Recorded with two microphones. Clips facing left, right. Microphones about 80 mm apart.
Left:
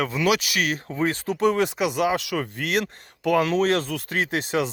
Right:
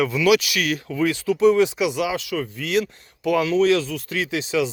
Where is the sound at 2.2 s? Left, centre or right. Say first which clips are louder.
Right 1 dB; left.